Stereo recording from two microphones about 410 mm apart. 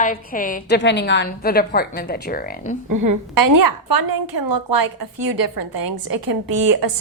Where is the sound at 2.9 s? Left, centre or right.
Right.